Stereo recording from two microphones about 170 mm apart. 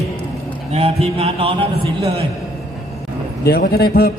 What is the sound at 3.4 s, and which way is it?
Speech, 70° left (ahead or behind).